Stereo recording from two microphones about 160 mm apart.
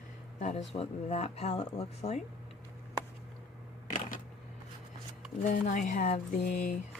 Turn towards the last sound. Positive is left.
turn(degrees=60)  # may be behind; listen again after turning